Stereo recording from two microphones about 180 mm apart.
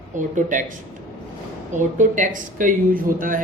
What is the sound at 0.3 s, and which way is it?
Speech, 45° right (ahead or behind).